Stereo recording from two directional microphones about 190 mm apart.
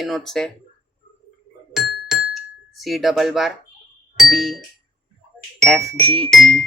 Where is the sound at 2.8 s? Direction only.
Centre (ahead or behind).